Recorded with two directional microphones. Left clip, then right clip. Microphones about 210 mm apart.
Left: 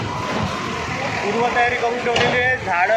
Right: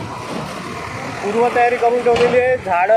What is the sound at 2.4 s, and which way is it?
Speech, 50° right (ahead or behind).